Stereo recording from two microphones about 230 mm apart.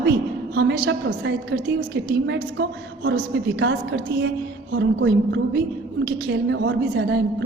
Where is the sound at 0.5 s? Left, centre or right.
Right.